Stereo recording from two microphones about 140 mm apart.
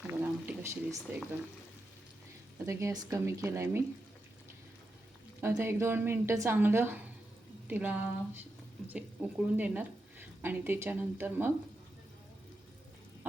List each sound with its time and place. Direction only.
0.1 s a sound: 15° right (ahead or behind)
2.6 s speech: 25° right (ahead or behind)
5.4 s a woman's voice: 20° right (ahead or behind)